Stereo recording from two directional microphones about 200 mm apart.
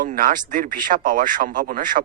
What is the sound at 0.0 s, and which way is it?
Speech, 40° right (ahead or behind).